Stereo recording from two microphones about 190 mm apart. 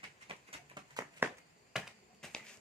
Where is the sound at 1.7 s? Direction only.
5° left (ahead or behind).